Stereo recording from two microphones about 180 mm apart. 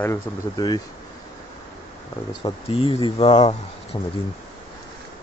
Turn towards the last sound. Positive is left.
turn(degrees=25)  # may be behind; listen again after turning